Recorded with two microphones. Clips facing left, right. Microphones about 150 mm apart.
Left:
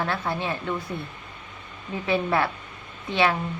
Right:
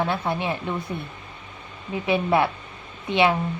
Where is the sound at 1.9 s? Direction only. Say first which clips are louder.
Right 3 dB; 20° right (ahead or behind).